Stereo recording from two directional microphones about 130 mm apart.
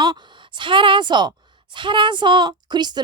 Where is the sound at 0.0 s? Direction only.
35° right (ahead or behind).